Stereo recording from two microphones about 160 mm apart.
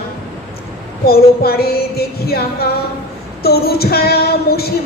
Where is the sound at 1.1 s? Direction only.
75° left (ahead or behind).